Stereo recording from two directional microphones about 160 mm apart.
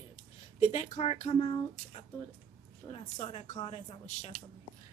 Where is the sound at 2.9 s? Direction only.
35° left (ahead or behind).